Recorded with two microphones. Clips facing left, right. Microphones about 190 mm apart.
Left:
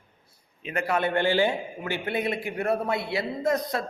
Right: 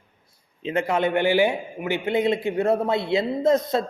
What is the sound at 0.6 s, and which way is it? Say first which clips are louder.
A man's voice: right 4 dB; 20° right (ahead or behind).